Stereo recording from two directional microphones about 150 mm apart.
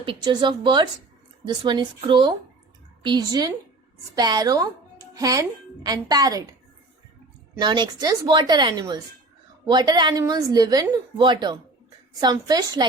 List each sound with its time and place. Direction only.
0.0 s speech: 30° right (ahead or behind)
7.6 s speech: 30° right (ahead or behind)